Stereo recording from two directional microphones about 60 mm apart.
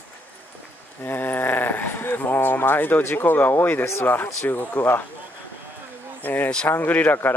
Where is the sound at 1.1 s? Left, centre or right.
Left.